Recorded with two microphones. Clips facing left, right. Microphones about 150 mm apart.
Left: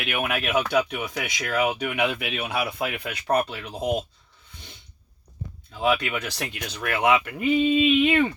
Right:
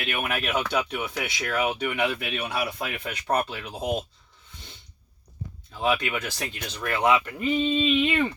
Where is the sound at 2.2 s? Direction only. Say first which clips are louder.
Left 1 dB; 55° left (ahead or behind).